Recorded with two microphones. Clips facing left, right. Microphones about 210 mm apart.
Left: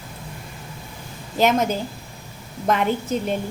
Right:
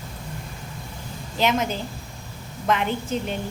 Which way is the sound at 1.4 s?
45° left (ahead or behind).